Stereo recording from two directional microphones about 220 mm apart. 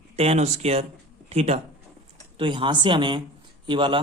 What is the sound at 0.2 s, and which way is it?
Speech, 30° right (ahead or behind).